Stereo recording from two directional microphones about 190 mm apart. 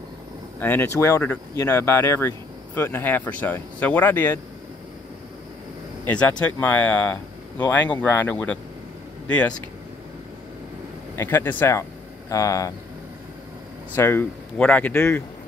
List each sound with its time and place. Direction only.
0.6 s speech: 10° left (ahead or behind)
6.0 s speech: 10° left (ahead or behind)
11.1 s speech: 10° left (ahead or behind)
13.9 s speech: 10° left (ahead or behind)